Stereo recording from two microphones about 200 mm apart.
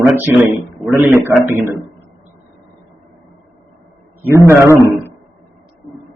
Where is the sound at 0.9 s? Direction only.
10° right (ahead or behind).